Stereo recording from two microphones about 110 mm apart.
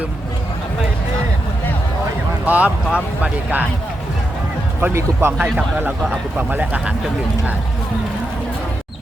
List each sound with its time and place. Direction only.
2.5 s speech: 15° right (ahead or behind)
4.8 s speech: 20° right (ahead or behind)
5.5 s speech: 10° right (ahead or behind)